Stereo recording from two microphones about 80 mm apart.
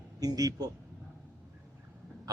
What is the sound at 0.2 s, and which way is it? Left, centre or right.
Speech, right.